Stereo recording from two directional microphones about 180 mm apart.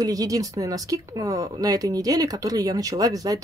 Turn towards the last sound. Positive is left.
turn(degrees=-20)  # may be behind; listen again after turning